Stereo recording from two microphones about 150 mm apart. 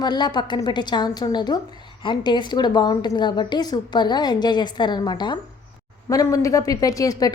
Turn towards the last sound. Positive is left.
turn(degrees=25)  # may be behind; listen again after turning